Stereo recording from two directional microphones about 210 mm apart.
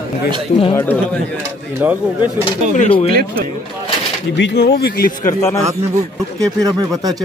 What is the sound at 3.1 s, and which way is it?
Speech, 45° right (ahead or behind).